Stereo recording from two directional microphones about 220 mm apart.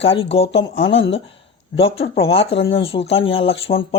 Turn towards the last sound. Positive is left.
turn(degrees=25)  # may be behind; listen again after turning